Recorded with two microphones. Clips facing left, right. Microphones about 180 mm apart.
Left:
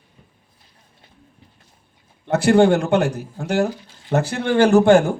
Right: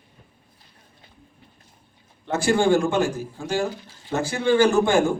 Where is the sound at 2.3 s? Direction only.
65° left (ahead or behind).